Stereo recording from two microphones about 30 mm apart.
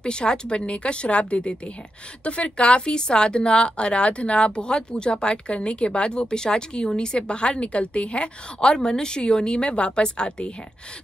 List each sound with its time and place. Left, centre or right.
0.0 s speech: left